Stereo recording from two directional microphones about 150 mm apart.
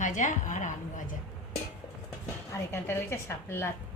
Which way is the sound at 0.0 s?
55° left (ahead or behind).